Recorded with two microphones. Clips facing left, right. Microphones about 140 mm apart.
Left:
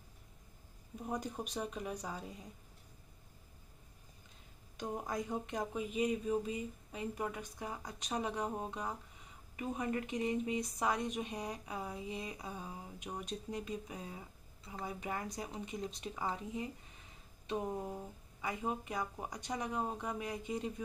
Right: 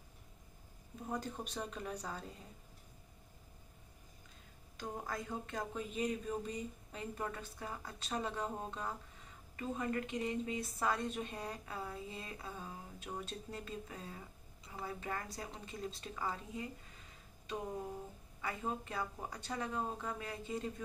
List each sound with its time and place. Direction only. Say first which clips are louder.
1.0 s speech: left 2 dB; 15° left (ahead or behind)
4.7 s speech: left 4 dB; 20° left (ahead or behind)